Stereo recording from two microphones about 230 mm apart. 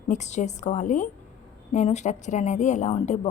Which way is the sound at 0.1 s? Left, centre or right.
Left.